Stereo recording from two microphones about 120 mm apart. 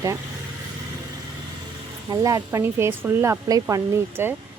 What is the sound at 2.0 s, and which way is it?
A woman's voice, 30° right (ahead or behind).